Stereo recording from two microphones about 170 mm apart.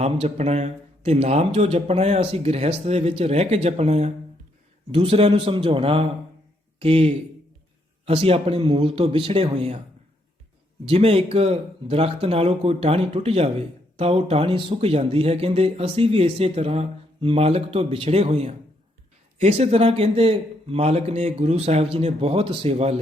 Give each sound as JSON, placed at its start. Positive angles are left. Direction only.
{"t": 0.0, "sound": "speech", "side_deg": -40}
{"t": 10.8, "sound": "speech", "side_deg": -35}